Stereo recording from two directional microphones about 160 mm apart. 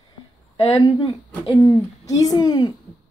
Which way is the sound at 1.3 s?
20° left (ahead or behind).